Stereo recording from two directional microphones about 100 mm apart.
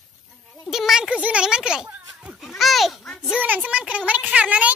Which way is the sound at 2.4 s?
Centre (ahead or behind).